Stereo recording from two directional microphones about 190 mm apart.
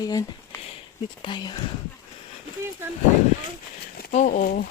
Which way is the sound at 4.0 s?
45° left (ahead or behind).